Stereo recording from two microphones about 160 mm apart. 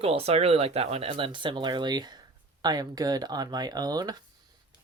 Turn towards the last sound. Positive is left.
turn(degrees=-25)  # may be behind; listen again after turning